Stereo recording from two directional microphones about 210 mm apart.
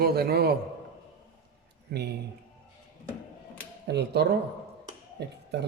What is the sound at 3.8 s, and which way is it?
A man's voice, 50° right (ahead or behind).